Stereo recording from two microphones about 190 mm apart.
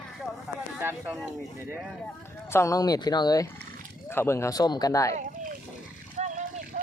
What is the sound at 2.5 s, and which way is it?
Speech, 15° left (ahead or behind).